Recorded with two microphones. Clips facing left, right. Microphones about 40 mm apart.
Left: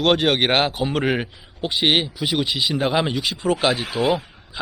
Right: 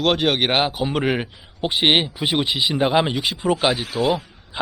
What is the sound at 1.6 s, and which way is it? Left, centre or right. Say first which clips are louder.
Speech: right 2 dB; right.